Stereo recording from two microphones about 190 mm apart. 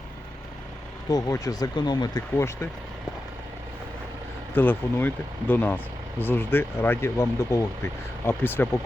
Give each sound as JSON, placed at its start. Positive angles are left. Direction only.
{"t": 1.1, "sound": "speech", "side_deg": 20}
{"t": 4.5, "sound": "speech", "side_deg": 10}